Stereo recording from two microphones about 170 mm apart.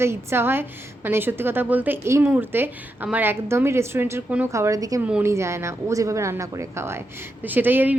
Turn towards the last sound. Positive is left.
turn(degrees=-10)  # may be behind; listen again after turning